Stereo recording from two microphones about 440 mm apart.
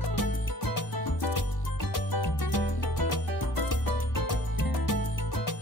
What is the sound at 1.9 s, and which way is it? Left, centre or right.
Music, left.